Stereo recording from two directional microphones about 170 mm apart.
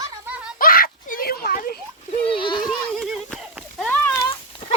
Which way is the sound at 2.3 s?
30° left (ahead or behind).